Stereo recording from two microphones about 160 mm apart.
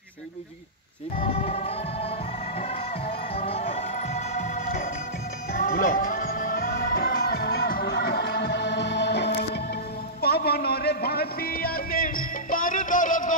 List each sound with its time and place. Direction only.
1.1 s music: 40° left (ahead or behind); by 9.3 s 90° left
10.2 s music: 75° left (ahead or behind); by 13.3 s 55° left (ahead or behind)